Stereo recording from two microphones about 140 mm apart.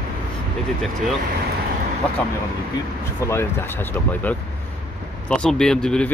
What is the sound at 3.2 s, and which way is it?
Speech, 20° left (ahead or behind).